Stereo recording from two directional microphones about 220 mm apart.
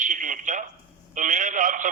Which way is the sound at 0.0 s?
35° right (ahead or behind).